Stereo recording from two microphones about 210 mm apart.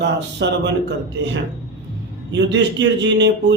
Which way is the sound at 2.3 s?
60° right (ahead or behind).